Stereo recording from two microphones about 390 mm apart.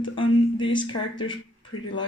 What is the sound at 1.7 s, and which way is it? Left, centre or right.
Speech, left.